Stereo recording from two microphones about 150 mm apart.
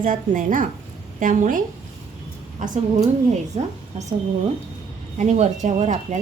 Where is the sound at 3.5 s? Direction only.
45° right (ahead or behind).